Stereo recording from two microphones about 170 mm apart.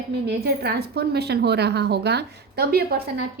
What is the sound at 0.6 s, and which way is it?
A woman's voice, 70° right (ahead or behind).